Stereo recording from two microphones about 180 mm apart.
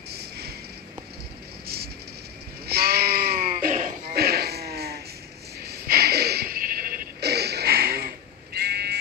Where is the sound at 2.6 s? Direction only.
60° right (ahead or behind).